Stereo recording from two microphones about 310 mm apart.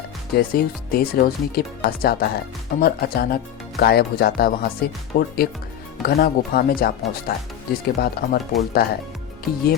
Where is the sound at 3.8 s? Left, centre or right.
Left.